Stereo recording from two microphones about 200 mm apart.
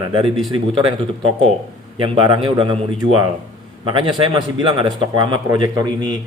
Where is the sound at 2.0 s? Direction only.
25° right (ahead or behind).